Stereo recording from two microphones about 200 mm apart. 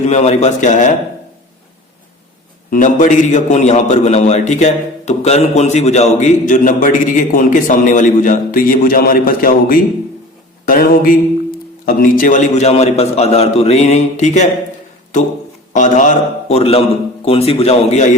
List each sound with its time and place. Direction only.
0.0 s a man's voice: 35° left (ahead or behind)
2.6 s a man's voice: 40° left (ahead or behind)
15.7 s a man's voice: 40° left (ahead or behind)